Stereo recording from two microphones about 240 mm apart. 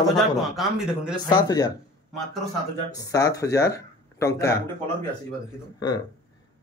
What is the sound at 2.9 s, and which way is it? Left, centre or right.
Speech, centre.